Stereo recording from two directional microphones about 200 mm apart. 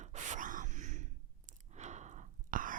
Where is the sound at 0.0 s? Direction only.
35° right (ahead or behind).